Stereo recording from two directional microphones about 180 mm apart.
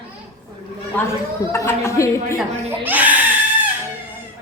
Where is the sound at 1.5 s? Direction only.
15° left (ahead or behind).